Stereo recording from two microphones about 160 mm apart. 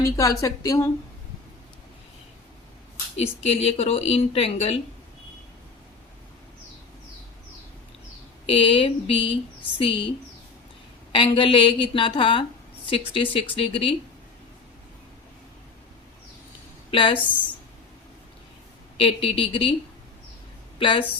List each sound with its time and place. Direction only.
0.0 s a woman's voice: 20° left (ahead or behind)
3.2 s speech: 40° left (ahead or behind)
8.4 s speech: 35° left (ahead or behind)
11.1 s a woman's voice: 30° left (ahead or behind)
16.9 s speech: 35° left (ahead or behind)
18.9 s speech: 35° left (ahead or behind)
20.7 s a woman's voice: 30° left (ahead or behind)